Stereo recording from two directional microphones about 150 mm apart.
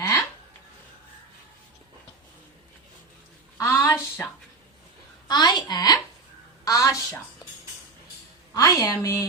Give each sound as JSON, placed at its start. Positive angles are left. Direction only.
{"t": 3.6, "sound": "a sound", "side_deg": 15}
{"t": 5.3, "sound": "a woman's voice", "side_deg": 25}
{"t": 8.5, "sound": "a woman's voice", "side_deg": 25}